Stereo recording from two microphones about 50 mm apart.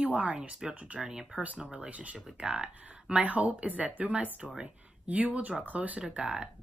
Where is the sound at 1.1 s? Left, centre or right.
Centre.